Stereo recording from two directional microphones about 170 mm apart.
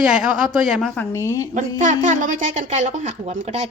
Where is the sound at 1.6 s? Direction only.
45° right (ahead or behind).